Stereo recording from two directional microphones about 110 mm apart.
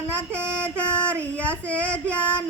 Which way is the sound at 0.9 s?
10° left (ahead or behind).